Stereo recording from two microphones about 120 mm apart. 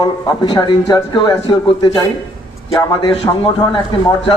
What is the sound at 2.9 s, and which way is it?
A man's voice, 35° left (ahead or behind).